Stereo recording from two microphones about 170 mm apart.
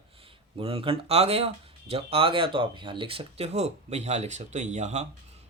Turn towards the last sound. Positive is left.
turn(degrees=-40)  # may be behind; listen again after turning